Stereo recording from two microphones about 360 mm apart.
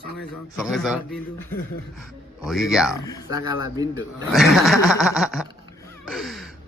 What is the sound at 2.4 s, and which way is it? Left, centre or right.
Speech, centre.